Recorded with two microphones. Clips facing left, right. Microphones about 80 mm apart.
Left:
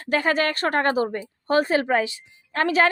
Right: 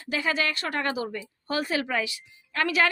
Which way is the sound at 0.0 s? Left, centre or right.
Left.